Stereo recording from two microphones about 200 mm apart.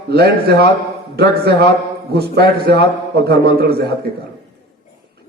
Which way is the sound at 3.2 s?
50° right (ahead or behind).